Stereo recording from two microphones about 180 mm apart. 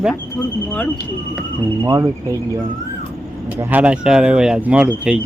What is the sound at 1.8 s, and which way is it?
Speech, 20° right (ahead or behind).